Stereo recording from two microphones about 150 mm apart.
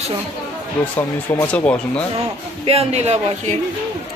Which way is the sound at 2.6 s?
45° right (ahead or behind).